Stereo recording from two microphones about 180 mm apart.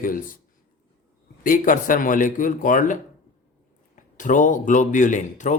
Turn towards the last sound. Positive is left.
turn(degrees=45)  # may be behind; listen again after turning